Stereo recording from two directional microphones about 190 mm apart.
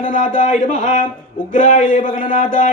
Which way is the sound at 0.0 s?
45° left (ahead or behind).